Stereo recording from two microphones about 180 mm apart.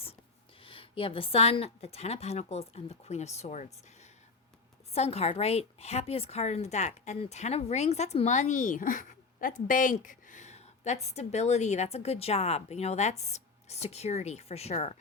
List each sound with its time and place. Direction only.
0.6 s a woman's voice: 30° left (ahead or behind)
4.9 s a woman's voice: 35° left (ahead or behind)